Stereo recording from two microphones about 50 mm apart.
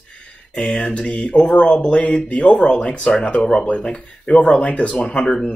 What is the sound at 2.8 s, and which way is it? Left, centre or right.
Speech, left.